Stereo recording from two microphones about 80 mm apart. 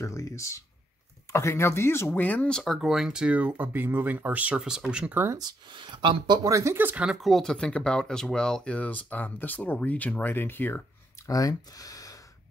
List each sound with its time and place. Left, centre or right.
0.0 s speech: left; by 2.6 s centre
2.6 s speech: centre
5.4 s speech: right
6.5 s speech: right
6.8 s speech: right
7.1 s speech: centre
7.5 s speech: centre
11.2 s speech: left